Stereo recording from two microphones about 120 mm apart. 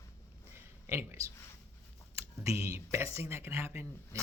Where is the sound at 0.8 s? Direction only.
20° right (ahead or behind).